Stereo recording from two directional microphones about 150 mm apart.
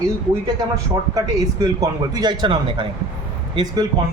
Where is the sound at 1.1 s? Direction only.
25° right (ahead or behind).